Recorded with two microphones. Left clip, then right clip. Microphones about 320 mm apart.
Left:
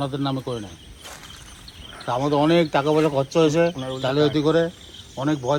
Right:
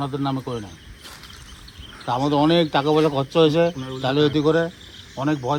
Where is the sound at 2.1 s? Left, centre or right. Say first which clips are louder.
Right 1 dB; right.